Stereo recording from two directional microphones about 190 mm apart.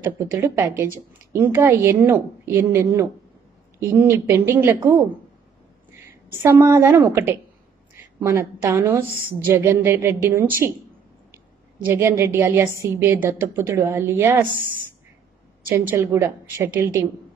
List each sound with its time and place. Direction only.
0.0 s a woman's voice: 15° right (ahead or behind)
6.6 s a woman's voice: 15° right (ahead or behind)
15.7 s a woman's voice: 15° right (ahead or behind)